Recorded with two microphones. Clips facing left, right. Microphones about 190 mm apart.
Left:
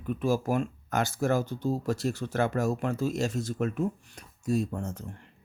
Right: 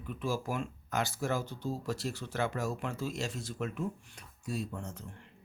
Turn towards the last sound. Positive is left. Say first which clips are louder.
# left 8 dB
turn(degrees=45)  # may be behind; listen again after turning